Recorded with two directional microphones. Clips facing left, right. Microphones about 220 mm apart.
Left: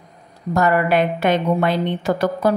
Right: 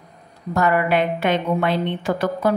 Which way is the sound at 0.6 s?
40° left (ahead or behind).